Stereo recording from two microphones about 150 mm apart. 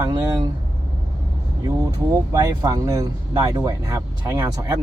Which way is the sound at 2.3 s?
25° right (ahead or behind).